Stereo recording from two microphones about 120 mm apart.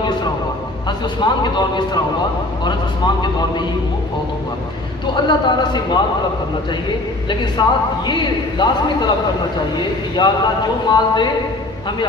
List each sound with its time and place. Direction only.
0.8 s speech: 40° left (ahead or behind)
3.2 s speech: 40° left (ahead or behind)
5.1 s speech: 40° left (ahead or behind)
7.6 s speech: 35° left (ahead or behind)